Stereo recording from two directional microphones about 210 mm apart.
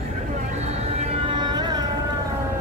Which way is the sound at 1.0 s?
25° right (ahead or behind).